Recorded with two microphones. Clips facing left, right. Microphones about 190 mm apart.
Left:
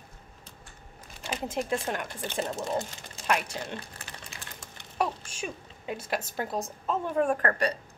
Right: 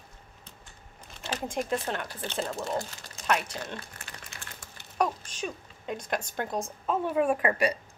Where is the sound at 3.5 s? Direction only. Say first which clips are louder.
Left 1 dB; 15° left (ahead or behind).